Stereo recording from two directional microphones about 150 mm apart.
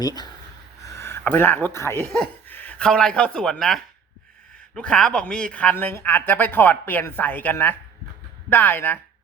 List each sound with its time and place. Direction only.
0.0 s speech: 25° left (ahead or behind)